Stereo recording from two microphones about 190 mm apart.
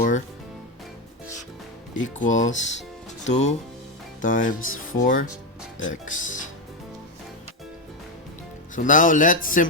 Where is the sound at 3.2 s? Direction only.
35° left (ahead or behind).